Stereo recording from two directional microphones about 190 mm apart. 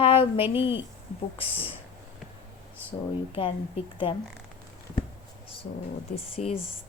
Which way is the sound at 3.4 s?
30° left (ahead or behind).